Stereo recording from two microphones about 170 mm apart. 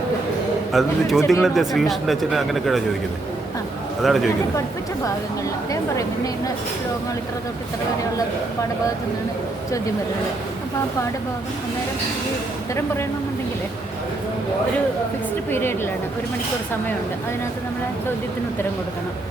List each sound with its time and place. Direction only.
0.7 s speech: centre (ahead or behind)
4.0 s speech: centre (ahead or behind)
15.4 s a woman's voice: 15° left (ahead or behind)